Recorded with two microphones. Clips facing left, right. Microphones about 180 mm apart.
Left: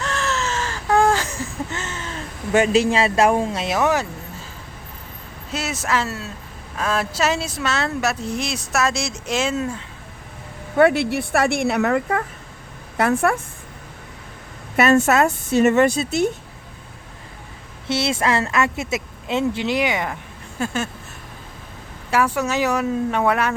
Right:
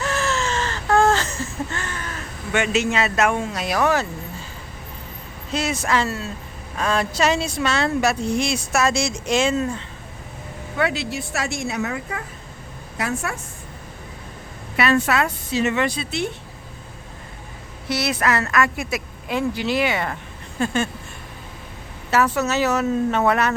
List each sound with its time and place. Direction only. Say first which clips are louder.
0.0 s baby cry: right 1 dB; 5° right (ahead or behind); by 4.0 s 20° left (ahead or behind)
5.5 s speech: right 2 dB; 5° left (ahead or behind)
10.8 s speech: left 8 dB; 55° left (ahead or behind)
14.8 s a woman's voice: left 4 dB; 45° left (ahead or behind)
17.8 s a woman's voice: left 1 dB; 25° left (ahead or behind); by 20.9 s 5° left (ahead or behind)
22.1 s speech: even; 10° left (ahead or behind)